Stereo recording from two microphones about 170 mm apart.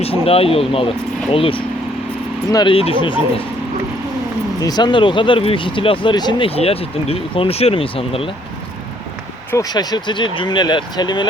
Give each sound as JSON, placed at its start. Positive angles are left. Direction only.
{"t": 0.0, "sound": "speech", "side_deg": 35}
{"t": 4.6, "sound": "speech", "side_deg": 25}
{"t": 9.5, "sound": "speech", "side_deg": 20}